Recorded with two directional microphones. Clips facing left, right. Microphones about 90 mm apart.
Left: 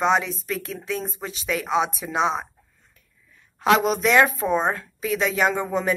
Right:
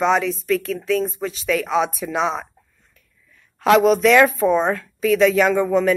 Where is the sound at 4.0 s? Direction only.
25° left (ahead or behind).